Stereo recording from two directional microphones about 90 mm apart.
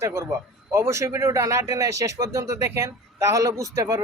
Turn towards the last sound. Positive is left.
turn(degrees=-35)  # may be behind; listen again after turning